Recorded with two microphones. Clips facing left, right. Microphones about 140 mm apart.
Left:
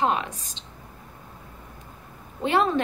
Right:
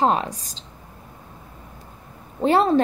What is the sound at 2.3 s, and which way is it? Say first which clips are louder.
Speech: right 5 dB; 35° right (ahead or behind).